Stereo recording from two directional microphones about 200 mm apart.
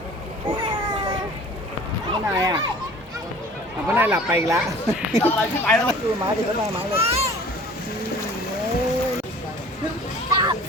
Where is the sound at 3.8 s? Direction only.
10° right (ahead or behind).